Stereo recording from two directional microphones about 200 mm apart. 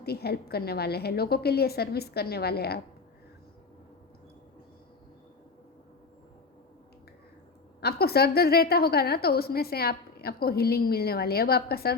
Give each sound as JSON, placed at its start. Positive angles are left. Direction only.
{"t": 0.0, "sound": "a woman's voice", "side_deg": 50}
{"t": 7.8, "sound": "a woman's voice", "side_deg": 50}